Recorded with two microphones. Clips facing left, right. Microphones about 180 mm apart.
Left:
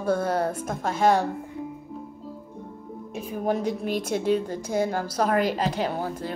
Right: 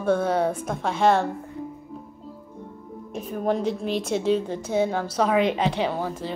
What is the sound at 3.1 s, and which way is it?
A woman's voice, 5° left (ahead or behind).